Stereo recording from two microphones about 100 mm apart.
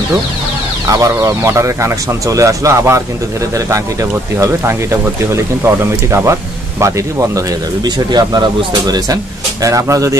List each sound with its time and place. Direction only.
0.8 s speech: 35° right (ahead or behind)
7.8 s speech: 45° right (ahead or behind)